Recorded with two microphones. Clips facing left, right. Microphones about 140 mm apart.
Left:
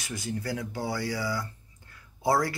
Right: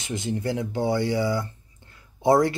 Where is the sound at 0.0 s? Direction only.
25° right (ahead or behind).